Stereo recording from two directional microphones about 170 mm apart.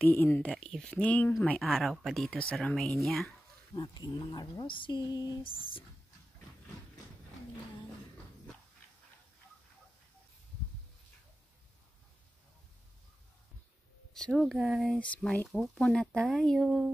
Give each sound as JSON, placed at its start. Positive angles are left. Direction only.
{"t": 0.0, "sound": "speech", "side_deg": 10}
{"t": 3.7, "sound": "speech", "side_deg": 25}
{"t": 14.1, "sound": "speech", "side_deg": 5}